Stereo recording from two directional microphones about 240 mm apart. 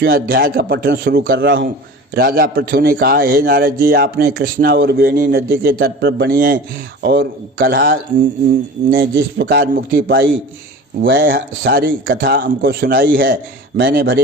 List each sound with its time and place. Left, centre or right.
0.0 s a man's voice: right
1.2 s a man's voice: right
2.1 s a man's voice: right